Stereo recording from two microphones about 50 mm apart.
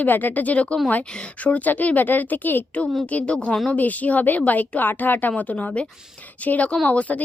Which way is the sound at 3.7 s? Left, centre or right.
Left.